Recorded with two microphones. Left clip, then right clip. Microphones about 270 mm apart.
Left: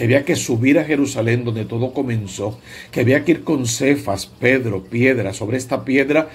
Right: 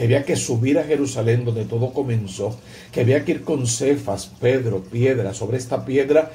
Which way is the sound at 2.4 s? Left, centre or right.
Left.